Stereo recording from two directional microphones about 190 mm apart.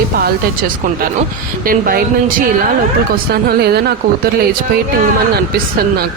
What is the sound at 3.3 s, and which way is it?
Speech, 55° right (ahead or behind).